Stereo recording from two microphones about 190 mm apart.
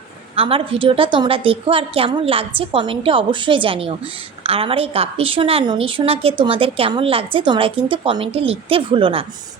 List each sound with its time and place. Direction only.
0.3 s a woman's voice: 30° right (ahead or behind)